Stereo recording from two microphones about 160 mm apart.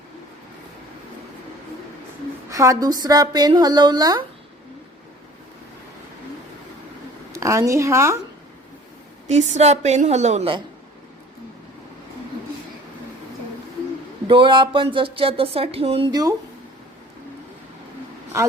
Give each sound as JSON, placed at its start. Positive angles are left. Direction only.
{"t": 2.5, "sound": "a woman's voice", "side_deg": -20}
{"t": 7.3, "sound": "a woman's voice", "side_deg": -20}
{"t": 9.2, "sound": "a woman's voice", "side_deg": -45}
{"t": 14.3, "sound": "speech", "side_deg": -30}